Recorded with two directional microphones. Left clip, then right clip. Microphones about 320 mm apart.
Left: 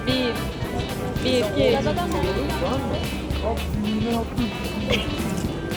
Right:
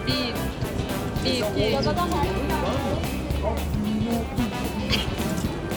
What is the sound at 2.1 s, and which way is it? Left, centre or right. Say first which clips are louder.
Music: left 1 dB; centre.